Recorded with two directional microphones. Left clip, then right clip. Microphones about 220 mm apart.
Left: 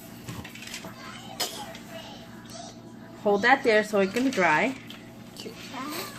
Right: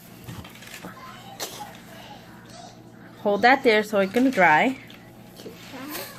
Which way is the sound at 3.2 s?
35° right (ahead or behind).